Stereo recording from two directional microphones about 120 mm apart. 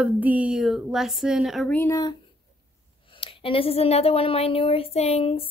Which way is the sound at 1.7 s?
15° left (ahead or behind).